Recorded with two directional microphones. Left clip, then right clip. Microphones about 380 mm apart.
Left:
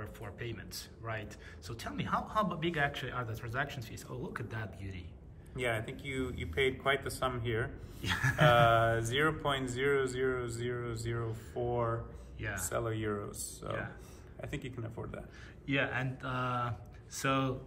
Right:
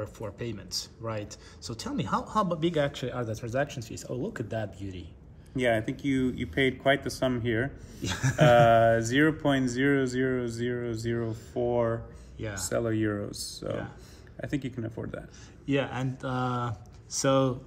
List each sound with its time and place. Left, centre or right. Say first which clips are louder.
0.0 s speech: right 8 dB; centre
5.6 s speech: right 9 dB; right
8.0 s speech: even; centre
8.5 s speech: right 7 dB; right
12.4 s speech: right 3 dB; centre
12.6 s speech: right 8 dB; right
15.6 s speech: right 4 dB; centre